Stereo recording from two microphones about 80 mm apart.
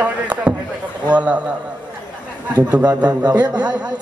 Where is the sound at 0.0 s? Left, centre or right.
Centre.